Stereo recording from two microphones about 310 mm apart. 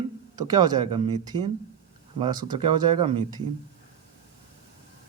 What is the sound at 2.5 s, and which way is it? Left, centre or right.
Speech, centre.